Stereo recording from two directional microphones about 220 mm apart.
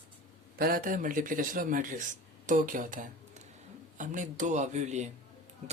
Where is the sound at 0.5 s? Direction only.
45° right (ahead or behind).